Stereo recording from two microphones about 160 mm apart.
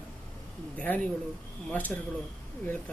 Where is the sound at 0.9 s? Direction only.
10° left (ahead or behind).